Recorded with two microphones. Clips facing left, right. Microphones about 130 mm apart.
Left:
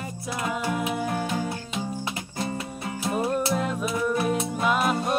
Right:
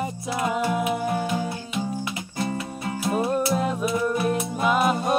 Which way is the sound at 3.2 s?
5° right (ahead or behind).